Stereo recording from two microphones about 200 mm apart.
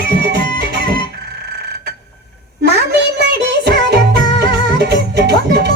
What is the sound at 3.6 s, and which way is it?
Music, 55° right (ahead or behind).